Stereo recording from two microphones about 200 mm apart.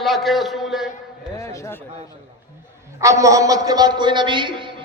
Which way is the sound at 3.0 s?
15° right (ahead or behind).